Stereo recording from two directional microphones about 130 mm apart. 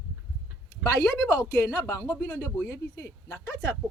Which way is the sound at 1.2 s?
25° left (ahead or behind).